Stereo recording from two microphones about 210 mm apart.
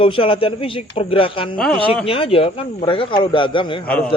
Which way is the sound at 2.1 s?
25° left (ahead or behind).